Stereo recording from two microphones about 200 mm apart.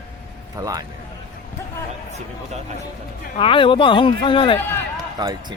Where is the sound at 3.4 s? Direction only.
25° left (ahead or behind).